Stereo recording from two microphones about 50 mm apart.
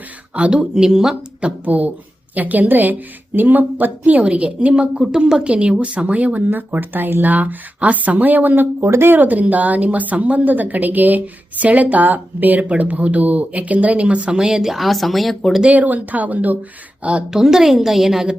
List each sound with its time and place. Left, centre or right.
0.3 s speech: right
0.6 s a woman's voice: centre
1.6 s a woman's voice: right
6.5 s a woman's voice: right
8.8 s speech: right
9.1 s a woman's voice: right; by 15.4 s centre
15.7 s a woman's voice: right
17.3 s a woman's voice: centre